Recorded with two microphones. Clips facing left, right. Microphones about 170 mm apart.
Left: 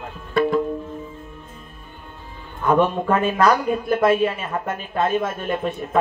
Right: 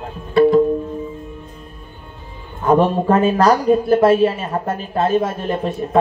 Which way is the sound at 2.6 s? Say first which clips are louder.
Right 4 dB; 35° right (ahead or behind).